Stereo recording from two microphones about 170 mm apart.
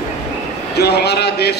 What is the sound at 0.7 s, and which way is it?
Speech, 75° left (ahead or behind).